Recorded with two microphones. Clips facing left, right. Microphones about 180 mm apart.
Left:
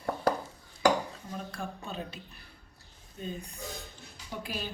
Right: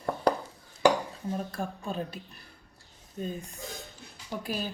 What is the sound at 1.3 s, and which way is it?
Speech, 45° right (ahead or behind).